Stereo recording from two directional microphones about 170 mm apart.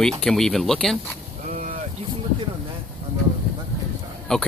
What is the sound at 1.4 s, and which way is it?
Boat, 50° right (ahead or behind).